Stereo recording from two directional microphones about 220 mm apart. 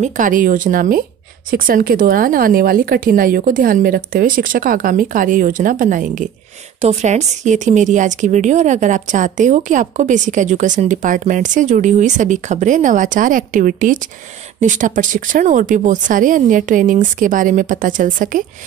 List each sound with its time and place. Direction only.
0.0 s a woman's voice: 35° right (ahead or behind)